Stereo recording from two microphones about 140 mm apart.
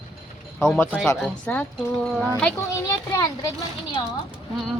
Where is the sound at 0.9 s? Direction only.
5° left (ahead or behind).